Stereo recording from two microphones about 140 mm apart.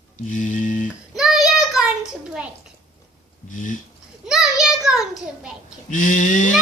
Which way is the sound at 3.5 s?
65° left (ahead or behind).